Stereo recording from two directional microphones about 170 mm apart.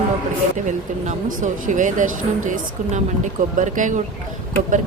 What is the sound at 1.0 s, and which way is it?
Speech, 50° right (ahead or behind).